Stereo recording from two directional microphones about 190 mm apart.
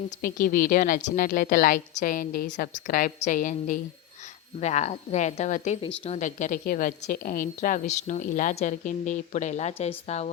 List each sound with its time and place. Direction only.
0.2 s a woman's voice: 50° left (ahead or behind)